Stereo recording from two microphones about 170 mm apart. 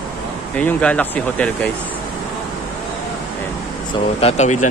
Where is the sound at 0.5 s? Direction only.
5° left (ahead or behind).